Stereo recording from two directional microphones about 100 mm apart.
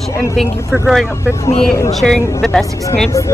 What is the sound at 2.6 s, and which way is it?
Speech, 35° left (ahead or behind).